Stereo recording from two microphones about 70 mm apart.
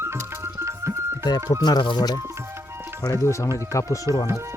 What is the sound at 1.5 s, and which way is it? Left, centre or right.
Speech, left.